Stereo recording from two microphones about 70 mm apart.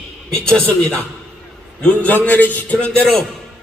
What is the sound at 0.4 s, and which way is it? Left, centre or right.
A man's voice, centre.